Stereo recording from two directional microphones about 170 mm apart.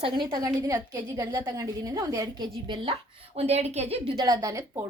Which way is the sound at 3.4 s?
40° right (ahead or behind).